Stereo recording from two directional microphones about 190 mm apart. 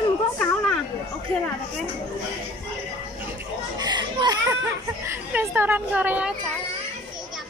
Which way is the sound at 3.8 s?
20° right (ahead or behind).